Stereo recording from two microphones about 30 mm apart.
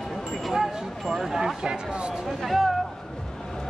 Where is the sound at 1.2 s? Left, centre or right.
Centre.